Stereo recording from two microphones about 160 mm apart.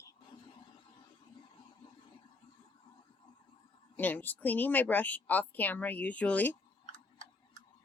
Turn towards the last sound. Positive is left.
turn(degrees=10)  # may be behind; listen again after turning